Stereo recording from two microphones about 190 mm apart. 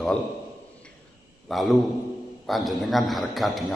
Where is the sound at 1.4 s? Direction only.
Centre (ahead or behind).